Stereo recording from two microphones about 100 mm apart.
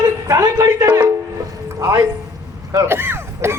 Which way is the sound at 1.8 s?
35° right (ahead or behind).